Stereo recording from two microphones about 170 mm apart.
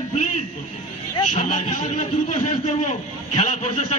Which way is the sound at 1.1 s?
40° left (ahead or behind).